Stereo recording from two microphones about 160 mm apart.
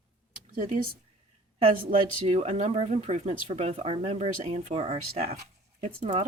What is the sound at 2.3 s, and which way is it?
Speech, 45° right (ahead or behind).